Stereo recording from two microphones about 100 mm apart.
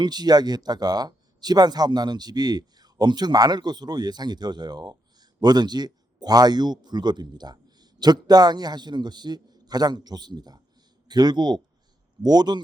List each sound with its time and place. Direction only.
0.0 s speech: 45° right (ahead or behind)